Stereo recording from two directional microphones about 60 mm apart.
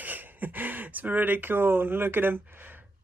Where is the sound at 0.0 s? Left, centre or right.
Right.